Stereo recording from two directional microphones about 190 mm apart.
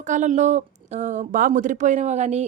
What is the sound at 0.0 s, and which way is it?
A woman's voice, 40° right (ahead or behind).